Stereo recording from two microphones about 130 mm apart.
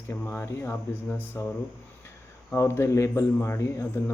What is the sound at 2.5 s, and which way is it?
Speech, 20° left (ahead or behind).